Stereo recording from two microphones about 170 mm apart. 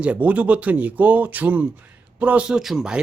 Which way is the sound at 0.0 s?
10° right (ahead or behind).